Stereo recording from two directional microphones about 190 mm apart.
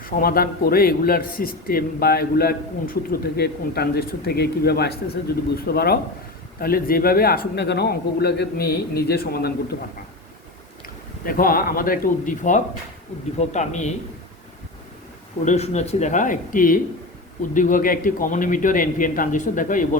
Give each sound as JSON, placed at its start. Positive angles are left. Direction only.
{"t": 0.0, "sound": "a man's voice", "side_deg": 50}
{"t": 10.8, "sound": "speech", "side_deg": 50}
{"t": 15.4, "sound": "a man's voice", "side_deg": 35}